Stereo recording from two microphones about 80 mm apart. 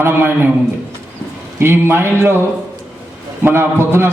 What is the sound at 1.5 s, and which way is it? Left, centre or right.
Speech, right.